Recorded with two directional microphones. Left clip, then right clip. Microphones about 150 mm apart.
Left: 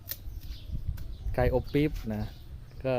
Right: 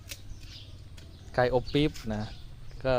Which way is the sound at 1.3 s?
15° left (ahead or behind).